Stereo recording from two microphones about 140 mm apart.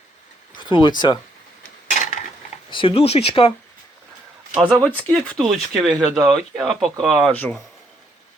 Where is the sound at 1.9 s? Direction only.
60° left (ahead or behind).